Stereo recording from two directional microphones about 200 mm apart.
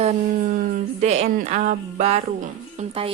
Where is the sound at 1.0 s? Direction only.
35° right (ahead or behind).